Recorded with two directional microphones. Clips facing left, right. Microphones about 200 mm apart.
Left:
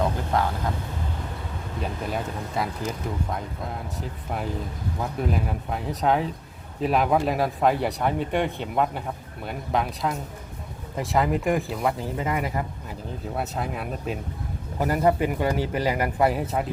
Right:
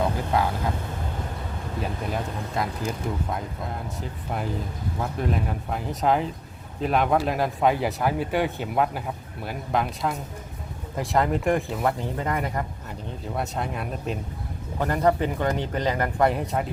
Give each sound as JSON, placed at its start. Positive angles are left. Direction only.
{"t": 0.3, "sound": "speech", "side_deg": -5}
{"t": 1.8, "sound": "a man's voice", "side_deg": 0}